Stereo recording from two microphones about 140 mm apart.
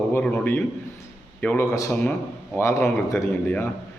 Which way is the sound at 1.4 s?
10° left (ahead or behind).